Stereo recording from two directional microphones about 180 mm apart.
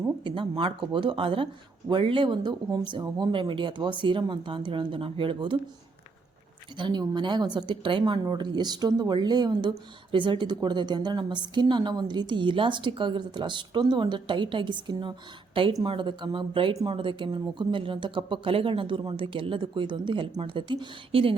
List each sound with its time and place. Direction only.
0.3 s a woman's voice: 30° right (ahead or behind)
6.7 s a woman's voice: 25° right (ahead or behind)